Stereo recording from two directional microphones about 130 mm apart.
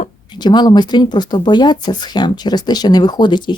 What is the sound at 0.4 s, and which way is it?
Speech, 35° left (ahead or behind).